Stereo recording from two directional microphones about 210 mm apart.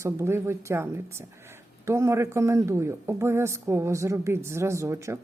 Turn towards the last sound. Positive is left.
turn(degrees=-15)  # may be behind; listen again after turning